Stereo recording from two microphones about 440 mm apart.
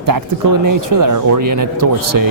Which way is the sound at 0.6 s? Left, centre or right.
Right.